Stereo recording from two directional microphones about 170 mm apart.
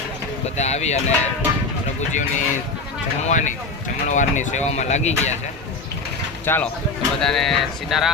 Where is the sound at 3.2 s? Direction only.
45° left (ahead or behind).